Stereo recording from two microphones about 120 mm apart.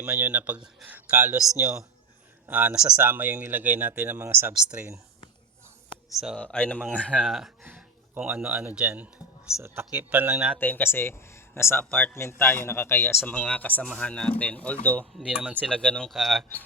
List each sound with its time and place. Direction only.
0.0 s speech: 15° right (ahead or behind)
2.5 s speech: 15° right (ahead or behind)
3.0 s speech: 15° right (ahead or behind)
6.1 s speech: 5° right (ahead or behind)
6.4 s speech: 10° left (ahead or behind)
6.7 s speech: 10° right (ahead or behind)
7.0 s speech: 5° left (ahead or behind)
8.1 s speech: 15° right (ahead or behind)
10.6 s speech: 15° left (ahead or behind)
15.3 s speech: 10° right (ahead or behind)
15.6 s speech: 10° left (ahead or behind)